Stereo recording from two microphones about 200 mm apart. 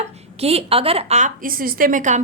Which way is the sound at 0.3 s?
30° right (ahead or behind).